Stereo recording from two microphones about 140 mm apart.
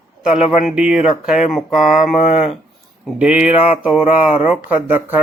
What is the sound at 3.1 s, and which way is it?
Speech, 10° right (ahead or behind).